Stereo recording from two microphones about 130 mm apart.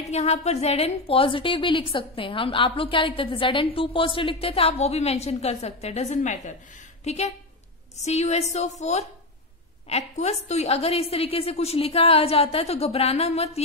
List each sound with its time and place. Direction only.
0.0 s a woman's voice: 55° left (ahead or behind)
7.1 s a woman's voice: 60° left (ahead or behind)